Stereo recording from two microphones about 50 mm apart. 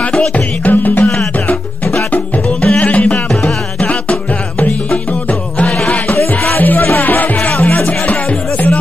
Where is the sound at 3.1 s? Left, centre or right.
Centre.